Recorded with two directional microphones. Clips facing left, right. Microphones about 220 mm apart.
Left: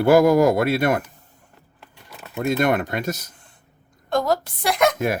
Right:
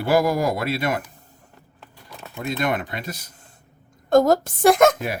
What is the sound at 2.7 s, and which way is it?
Speech, 45° left (ahead or behind).